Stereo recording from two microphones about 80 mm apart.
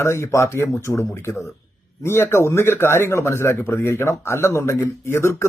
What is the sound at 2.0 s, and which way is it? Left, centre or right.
Speech, left.